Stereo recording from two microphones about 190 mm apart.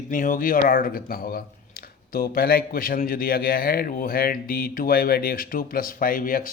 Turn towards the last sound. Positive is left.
turn(degrees=45)  # may be behind; listen again after turning